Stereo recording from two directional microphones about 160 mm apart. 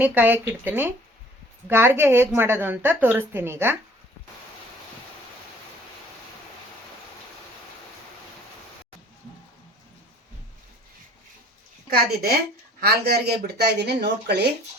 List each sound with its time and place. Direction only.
0.0 s a woman's voice: 10° right (ahead or behind)
11.9 s a woman's voice: 70° right (ahead or behind)
12.8 s speech: 90° right